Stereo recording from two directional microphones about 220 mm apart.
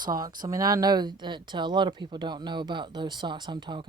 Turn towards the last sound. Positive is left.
turn(degrees=-20)  # may be behind; listen again after turning